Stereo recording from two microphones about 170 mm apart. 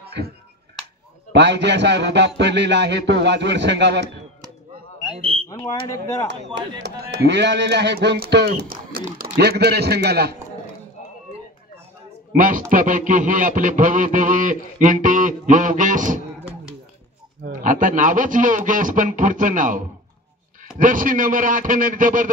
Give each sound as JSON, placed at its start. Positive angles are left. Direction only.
{"t": 1.3, "sound": "a man's voice", "side_deg": -90}
{"t": 5.1, "sound": "speech", "side_deg": -35}
{"t": 5.5, "sound": "speech", "side_deg": 20}
{"t": 6.8, "sound": "speech", "side_deg": -90}
{"t": 12.4, "sound": "a man's voice", "side_deg": -50}
{"t": 17.5, "sound": "a man's voice", "side_deg": -50}